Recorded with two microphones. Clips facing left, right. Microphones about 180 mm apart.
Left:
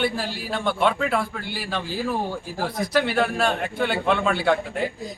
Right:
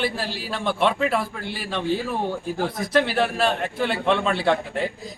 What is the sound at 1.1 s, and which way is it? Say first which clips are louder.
A man's voice: even; centre (ahead or behind).